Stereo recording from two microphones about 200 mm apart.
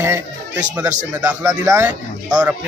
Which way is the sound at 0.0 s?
10° right (ahead or behind).